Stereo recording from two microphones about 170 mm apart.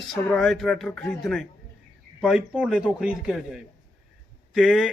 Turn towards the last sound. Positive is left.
turn(degrees=0)  # may be behind; listen again after turning